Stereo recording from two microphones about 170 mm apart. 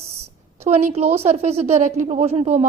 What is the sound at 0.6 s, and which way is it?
A woman's voice, 40° right (ahead or behind).